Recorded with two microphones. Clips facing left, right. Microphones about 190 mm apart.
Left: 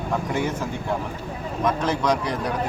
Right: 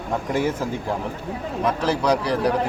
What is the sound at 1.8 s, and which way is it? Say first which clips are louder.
Speech: right 2 dB; 35° right (ahead or behind).